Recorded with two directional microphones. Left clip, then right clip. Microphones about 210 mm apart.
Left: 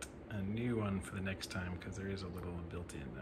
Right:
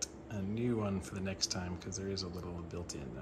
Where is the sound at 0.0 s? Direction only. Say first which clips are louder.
Right 4 dB; 15° right (ahead or behind).